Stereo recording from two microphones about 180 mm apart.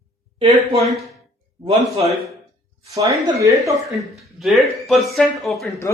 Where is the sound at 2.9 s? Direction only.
15° right (ahead or behind).